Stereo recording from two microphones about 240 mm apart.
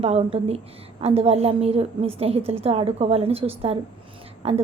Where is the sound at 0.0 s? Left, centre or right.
Right.